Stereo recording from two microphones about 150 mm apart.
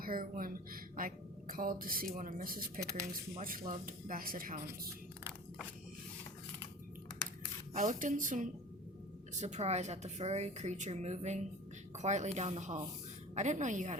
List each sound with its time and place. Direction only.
0.0 s speech: 70° right (ahead or behind)
7.8 s a woman's voice: 60° right (ahead or behind)